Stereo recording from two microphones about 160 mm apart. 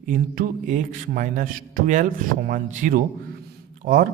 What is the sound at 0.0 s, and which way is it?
Speech, 55° right (ahead or behind).